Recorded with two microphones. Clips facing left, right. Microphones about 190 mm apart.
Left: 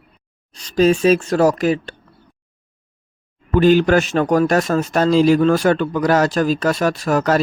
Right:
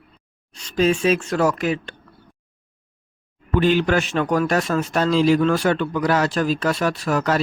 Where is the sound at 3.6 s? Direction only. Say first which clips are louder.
Left 5 dB; 45° left (ahead or behind).